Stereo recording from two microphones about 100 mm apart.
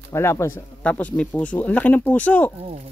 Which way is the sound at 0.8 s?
15° left (ahead or behind).